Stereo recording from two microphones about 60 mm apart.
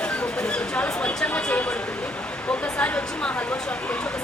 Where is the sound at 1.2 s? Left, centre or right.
Left.